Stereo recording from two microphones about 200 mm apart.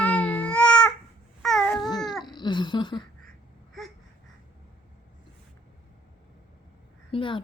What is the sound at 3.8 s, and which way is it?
Babbling, centre (ahead or behind).